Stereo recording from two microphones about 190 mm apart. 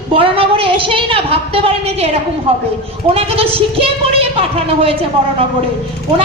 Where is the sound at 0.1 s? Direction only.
30° right (ahead or behind).